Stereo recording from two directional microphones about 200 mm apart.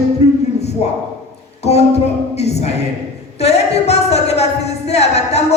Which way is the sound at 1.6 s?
30° left (ahead or behind).